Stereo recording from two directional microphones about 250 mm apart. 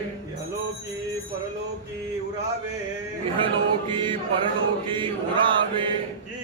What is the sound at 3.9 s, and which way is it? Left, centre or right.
Chant, centre.